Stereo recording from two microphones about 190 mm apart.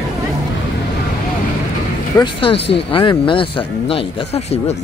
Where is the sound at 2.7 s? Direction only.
25° left (ahead or behind).